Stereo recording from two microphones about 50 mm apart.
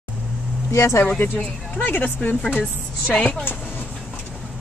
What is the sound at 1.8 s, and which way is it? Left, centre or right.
Speech, left.